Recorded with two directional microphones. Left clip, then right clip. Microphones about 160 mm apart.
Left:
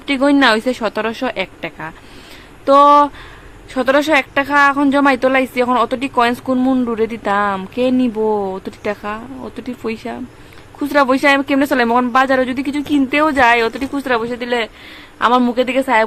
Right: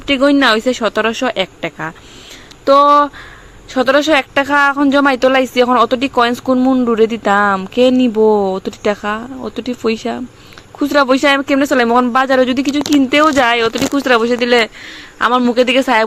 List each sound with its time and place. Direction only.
0.0 s speech: 15° right (ahead or behind)
6.8 s speech: 25° right (ahead or behind)